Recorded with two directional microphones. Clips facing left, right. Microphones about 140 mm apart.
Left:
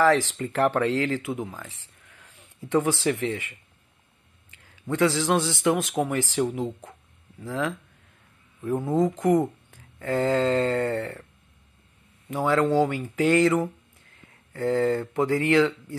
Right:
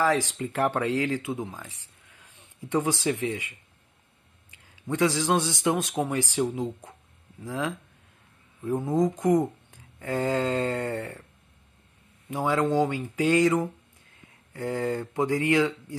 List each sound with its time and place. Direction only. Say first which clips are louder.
0.0 s a man's voice: left 4 dB; 15° right (ahead or behind)
8.8 s speech: left 1 dB; 15° right (ahead or behind)
12.3 s speech: left 2 dB; 15° right (ahead or behind)